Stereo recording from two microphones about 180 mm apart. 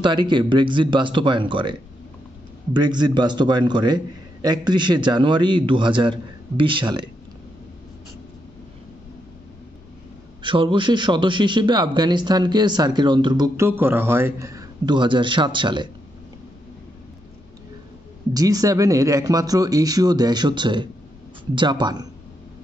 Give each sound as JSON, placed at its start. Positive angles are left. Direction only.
{"t": 0.0, "sound": "a man's voice", "side_deg": -25}
{"t": 10.4, "sound": "a man's voice", "side_deg": -25}
{"t": 18.3, "sound": "a man's voice", "side_deg": -20}